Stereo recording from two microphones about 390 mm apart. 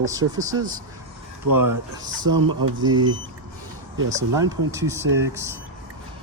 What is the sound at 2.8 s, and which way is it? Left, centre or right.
Speech, centre.